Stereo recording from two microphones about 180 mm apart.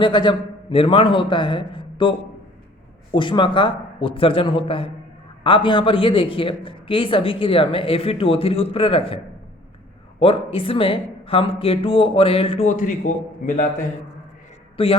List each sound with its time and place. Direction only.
0.0 s speech: 25° left (ahead or behind)
12.6 s a man's voice: 45° left (ahead or behind)
14.8 s speech: 30° left (ahead or behind)